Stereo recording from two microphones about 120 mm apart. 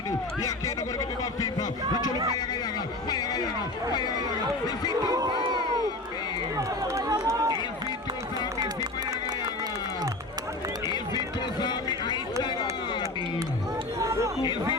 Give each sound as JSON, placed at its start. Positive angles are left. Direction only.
{"t": 0.4, "sound": "a man's voice", "side_deg": 30}
{"t": 3.1, "sound": "speech", "side_deg": 35}
{"t": 4.6, "sound": "speech", "side_deg": 35}
{"t": 5.0, "sound": "crowd", "side_deg": -35}
{"t": 6.6, "sound": "run", "side_deg": -25}
{"t": 8.5, "sound": "music", "side_deg": -30}
{"t": 10.8, "sound": "run", "side_deg": 35}
{"t": 11.6, "sound": "music", "side_deg": 35}
{"t": 14.0, "sound": "chatter", "side_deg": -25}